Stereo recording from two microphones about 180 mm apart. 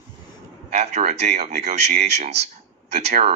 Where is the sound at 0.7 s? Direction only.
40° right (ahead or behind).